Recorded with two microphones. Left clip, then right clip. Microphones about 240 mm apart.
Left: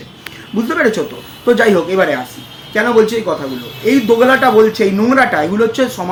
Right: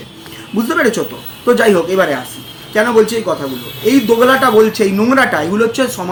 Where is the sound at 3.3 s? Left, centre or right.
Centre.